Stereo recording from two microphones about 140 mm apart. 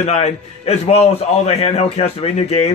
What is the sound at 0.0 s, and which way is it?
Speech, 50° left (ahead or behind).